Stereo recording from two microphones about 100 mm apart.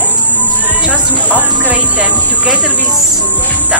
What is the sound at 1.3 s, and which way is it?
Speech, 15° right (ahead or behind).